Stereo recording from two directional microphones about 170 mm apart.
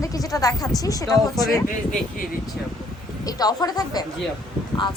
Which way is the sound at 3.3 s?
20° left (ahead or behind).